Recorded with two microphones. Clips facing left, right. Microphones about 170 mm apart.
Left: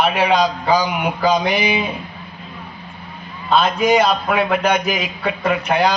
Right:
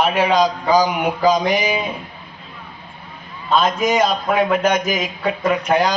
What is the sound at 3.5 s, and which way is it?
A man's voice, 40° right (ahead or behind).